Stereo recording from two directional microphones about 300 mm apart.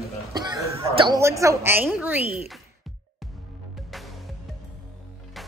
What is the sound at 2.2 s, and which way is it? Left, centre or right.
Speech, centre.